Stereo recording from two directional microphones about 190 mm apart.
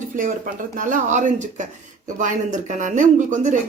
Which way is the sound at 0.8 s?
45° right (ahead or behind).